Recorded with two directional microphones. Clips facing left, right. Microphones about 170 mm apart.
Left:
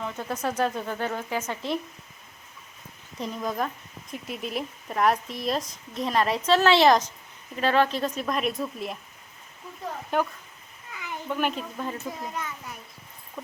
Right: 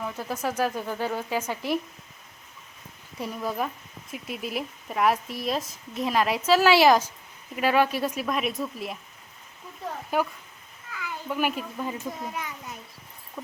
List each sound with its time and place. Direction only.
0.0 s speech: 5° right (ahead or behind)
3.2 s speech: 10° right (ahead or behind)
10.1 s speech: 5° right (ahead or behind)
10.9 s a sound: 20° left (ahead or behind)
11.3 s speech: 5° right (ahead or behind)
12.4 s a sound: 15° right (ahead or behind)